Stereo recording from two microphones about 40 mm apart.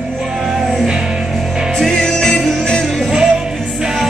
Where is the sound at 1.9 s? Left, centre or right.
Centre.